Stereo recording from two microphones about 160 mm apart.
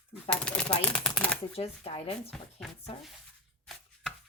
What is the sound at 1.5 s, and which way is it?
Speech, 40° left (ahead or behind).